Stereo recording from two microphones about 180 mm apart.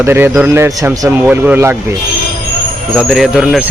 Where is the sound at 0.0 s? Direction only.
10° right (ahead or behind).